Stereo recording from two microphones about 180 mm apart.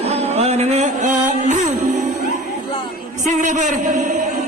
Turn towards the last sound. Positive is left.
turn(degrees=-45)  # may be behind; listen again after turning